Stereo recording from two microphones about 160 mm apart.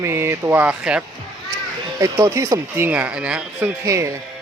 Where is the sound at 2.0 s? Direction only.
20° right (ahead or behind).